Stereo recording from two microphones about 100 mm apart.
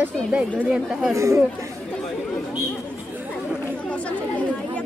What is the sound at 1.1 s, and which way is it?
Speech, 30° right (ahead or behind).